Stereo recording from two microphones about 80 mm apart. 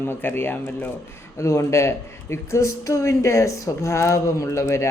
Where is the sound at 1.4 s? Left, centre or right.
Left.